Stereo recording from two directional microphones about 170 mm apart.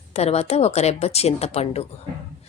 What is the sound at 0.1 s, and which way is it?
A woman's voice, 40° left (ahead or behind).